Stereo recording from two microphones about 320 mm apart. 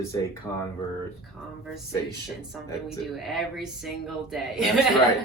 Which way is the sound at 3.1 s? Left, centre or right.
Centre.